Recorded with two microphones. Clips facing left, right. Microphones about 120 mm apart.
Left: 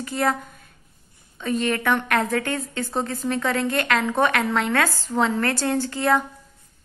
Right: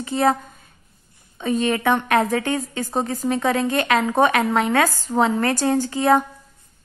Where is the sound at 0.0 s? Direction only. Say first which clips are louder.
Right 4 dB; 20° right (ahead or behind).